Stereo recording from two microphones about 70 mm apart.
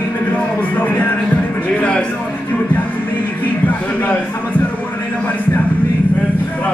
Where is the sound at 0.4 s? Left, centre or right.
Left.